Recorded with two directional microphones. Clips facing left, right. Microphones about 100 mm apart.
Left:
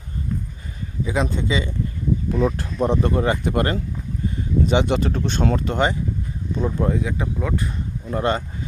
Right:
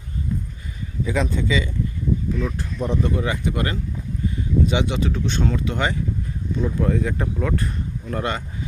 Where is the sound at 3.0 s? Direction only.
45° left (ahead or behind).